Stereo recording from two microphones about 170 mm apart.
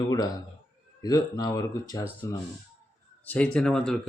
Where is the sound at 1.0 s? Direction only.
20° left (ahead or behind).